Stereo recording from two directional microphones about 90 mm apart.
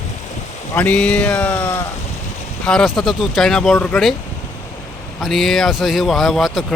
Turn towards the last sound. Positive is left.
turn(degrees=0)  # may be behind; listen again after turning